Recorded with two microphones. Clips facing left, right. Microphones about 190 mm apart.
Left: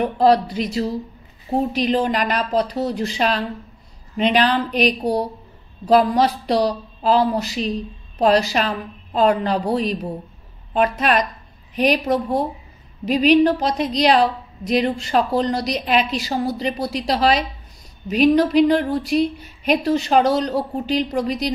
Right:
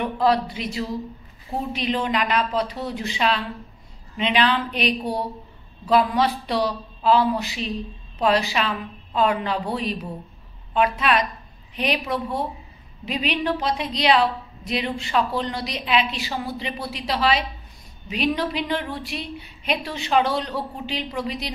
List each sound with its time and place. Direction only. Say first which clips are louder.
0.0 s a woman's voice: left 5 dB; 35° left (ahead or behind)